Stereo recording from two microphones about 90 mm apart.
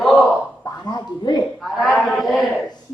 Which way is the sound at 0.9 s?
55° left (ahead or behind).